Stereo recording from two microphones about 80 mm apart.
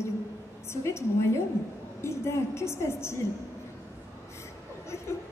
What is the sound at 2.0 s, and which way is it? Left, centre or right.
A man's voice, left.